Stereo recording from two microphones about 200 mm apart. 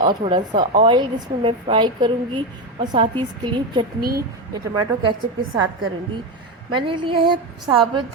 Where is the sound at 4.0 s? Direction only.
50° right (ahead or behind).